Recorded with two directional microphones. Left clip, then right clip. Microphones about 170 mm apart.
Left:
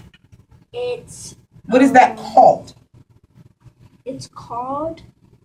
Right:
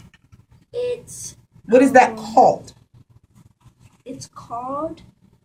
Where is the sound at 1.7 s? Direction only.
20° left (ahead or behind).